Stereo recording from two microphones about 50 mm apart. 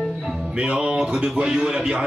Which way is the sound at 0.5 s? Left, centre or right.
Right.